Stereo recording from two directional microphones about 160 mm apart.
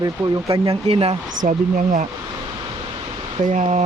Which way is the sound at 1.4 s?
55° right (ahead or behind).